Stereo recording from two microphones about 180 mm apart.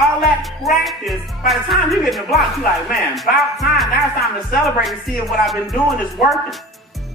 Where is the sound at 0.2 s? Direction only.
Centre (ahead or behind).